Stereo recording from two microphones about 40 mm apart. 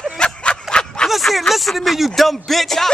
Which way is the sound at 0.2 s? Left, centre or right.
Left.